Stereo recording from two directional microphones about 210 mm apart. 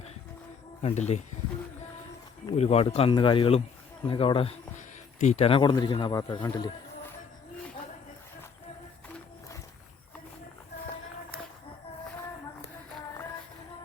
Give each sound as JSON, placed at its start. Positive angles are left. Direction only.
{"t": 0.8, "sound": "speech", "side_deg": 30}
{"t": 2.5, "sound": "speech", "side_deg": 30}